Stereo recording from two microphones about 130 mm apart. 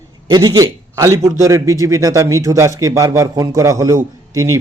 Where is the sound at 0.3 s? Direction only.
30° right (ahead or behind).